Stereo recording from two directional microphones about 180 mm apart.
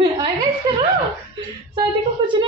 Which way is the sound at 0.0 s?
25° right (ahead or behind).